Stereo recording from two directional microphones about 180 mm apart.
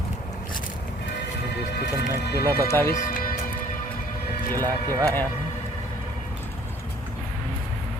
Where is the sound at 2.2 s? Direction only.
65° left (ahead or behind).